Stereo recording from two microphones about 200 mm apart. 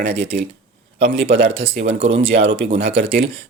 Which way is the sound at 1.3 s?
30° right (ahead or behind).